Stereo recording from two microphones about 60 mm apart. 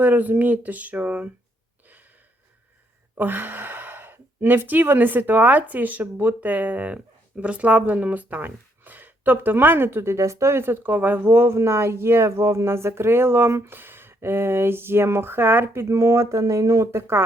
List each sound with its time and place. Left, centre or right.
0.0 s speech: right
3.2 s speech: right